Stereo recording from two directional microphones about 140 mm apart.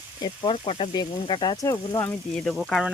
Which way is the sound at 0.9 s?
35° left (ahead or behind).